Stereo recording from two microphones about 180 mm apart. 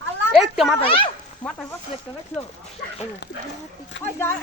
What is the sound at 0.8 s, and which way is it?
Speech, 30° left (ahead or behind).